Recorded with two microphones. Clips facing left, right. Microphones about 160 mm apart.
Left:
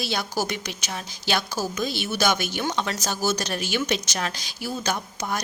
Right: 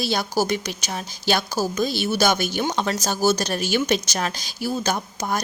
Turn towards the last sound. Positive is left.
turn(degrees=-40)  # may be behind; listen again after turning